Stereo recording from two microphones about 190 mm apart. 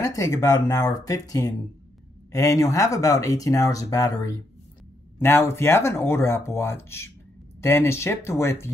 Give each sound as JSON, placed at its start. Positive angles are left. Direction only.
{"t": 0.0, "sound": "speech", "side_deg": 15}